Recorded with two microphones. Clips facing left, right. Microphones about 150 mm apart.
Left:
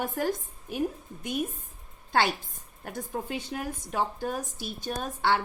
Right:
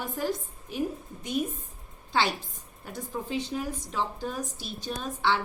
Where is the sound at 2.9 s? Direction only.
50° left (ahead or behind).